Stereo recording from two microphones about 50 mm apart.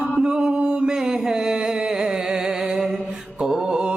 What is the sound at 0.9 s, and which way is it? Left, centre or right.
Music, centre.